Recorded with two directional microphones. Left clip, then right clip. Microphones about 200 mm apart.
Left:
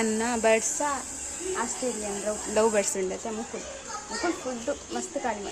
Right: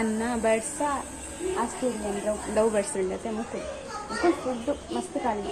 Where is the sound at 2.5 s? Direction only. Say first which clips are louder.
Left 1 dB; 30° left (ahead or behind).